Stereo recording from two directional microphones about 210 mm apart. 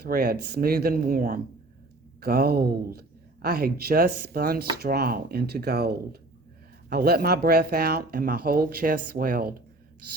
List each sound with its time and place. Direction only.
0.0 s speech: 45° right (ahead or behind)